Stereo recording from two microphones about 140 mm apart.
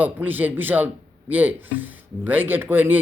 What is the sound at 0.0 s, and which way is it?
Speech, 10° right (ahead or behind).